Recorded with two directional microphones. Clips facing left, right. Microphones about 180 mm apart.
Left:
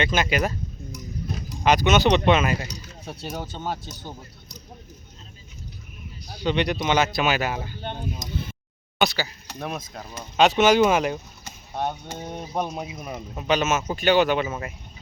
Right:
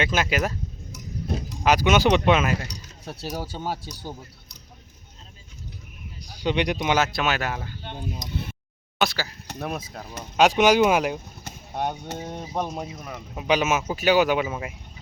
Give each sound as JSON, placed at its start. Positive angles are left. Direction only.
{"t": 0.0, "sound": "speech", "side_deg": -5}
{"t": 1.6, "sound": "speech", "side_deg": -10}
{"t": 6.4, "sound": "speech", "side_deg": -10}
{"t": 7.8, "sound": "speech", "side_deg": 55}
{"t": 9.0, "sound": "speech", "side_deg": 0}
{"t": 12.3, "sound": "speech", "side_deg": 5}
{"t": 13.3, "sound": "speech", "side_deg": -10}